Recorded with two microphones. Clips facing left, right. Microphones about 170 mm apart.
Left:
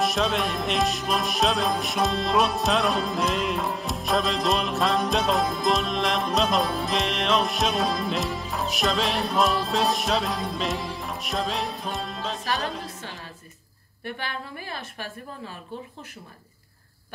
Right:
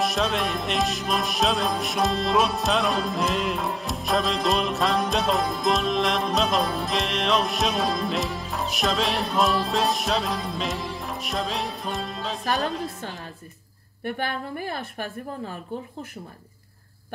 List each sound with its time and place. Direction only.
0.0 s music: centre (ahead or behind)
14.0 s a woman's voice: 50° right (ahead or behind)